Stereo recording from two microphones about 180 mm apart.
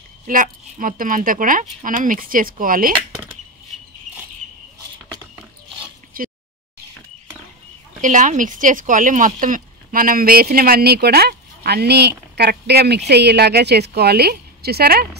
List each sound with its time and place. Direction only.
0.3 s speech: 50° right (ahead or behind)
6.2 s a sound: 50° right (ahead or behind)
8.0 s speech: 45° right (ahead or behind); by 15.0 s 60° right (ahead or behind)